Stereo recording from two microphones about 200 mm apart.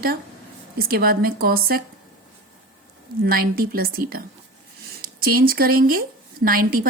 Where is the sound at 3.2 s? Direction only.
45° right (ahead or behind).